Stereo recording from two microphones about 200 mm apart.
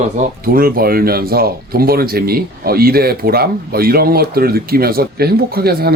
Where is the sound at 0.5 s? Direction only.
45° right (ahead or behind).